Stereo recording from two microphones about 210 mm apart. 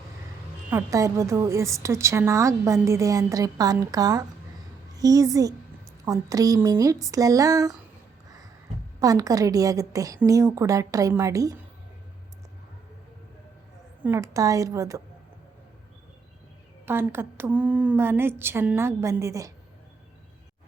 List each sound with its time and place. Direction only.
0.7 s a woman's voice: 15° right (ahead or behind)
9.0 s a woman's voice: 15° right (ahead or behind)
14.0 s a woman's voice: 10° right (ahead or behind)
16.8 s a woman's voice: 10° right (ahead or behind)